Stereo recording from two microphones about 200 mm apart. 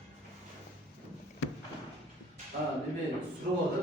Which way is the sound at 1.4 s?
55° left (ahead or behind).